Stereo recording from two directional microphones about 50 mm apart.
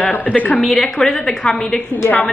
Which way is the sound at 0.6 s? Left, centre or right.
Centre.